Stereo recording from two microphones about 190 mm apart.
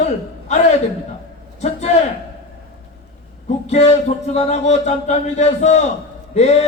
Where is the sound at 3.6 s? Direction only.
35° left (ahead or behind).